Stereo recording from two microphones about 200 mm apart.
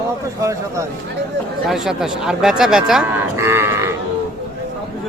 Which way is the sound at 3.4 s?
15° right (ahead or behind).